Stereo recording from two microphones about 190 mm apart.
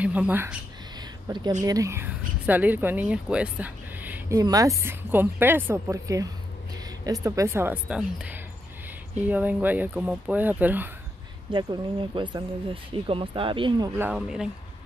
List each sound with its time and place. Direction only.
0.0 s speech: 10° right (ahead or behind)
1.3 s speech: 20° right (ahead or behind)
11.5 s speech: 25° right (ahead or behind)
13.9 s speech: 5° right (ahead or behind)